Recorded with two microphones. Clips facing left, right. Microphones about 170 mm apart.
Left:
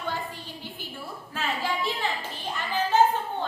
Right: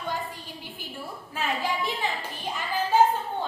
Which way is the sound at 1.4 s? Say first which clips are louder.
Right 1 dB; 15° right (ahead or behind).